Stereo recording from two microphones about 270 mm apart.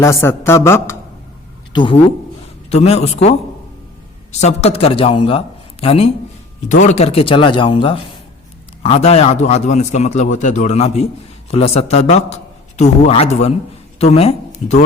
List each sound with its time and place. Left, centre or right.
0.0 s a woman's voice: centre